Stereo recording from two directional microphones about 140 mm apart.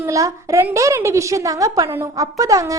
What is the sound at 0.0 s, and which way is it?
A woman's voice, 25° right (ahead or behind).